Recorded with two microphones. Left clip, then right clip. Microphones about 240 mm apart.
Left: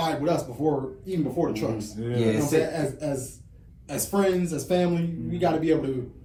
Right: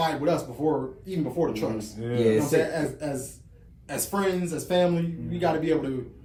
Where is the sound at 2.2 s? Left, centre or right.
Left.